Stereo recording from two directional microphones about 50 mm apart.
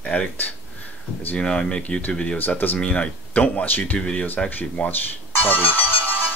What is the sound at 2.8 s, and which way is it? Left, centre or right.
Speech, left.